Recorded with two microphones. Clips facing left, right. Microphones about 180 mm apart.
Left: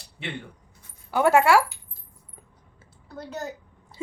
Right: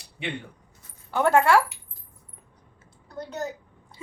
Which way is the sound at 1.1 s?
10° left (ahead or behind).